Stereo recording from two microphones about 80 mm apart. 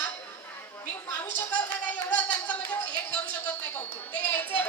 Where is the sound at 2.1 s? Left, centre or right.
Centre.